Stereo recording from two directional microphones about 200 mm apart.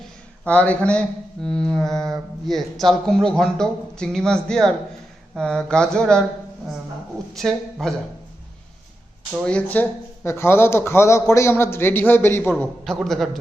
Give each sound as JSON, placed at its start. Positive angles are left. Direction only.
{"t": 0.4, "sound": "speech", "side_deg": 5}
{"t": 7.3, "sound": "speech", "side_deg": 0}
{"t": 9.4, "sound": "a man's voice", "side_deg": 5}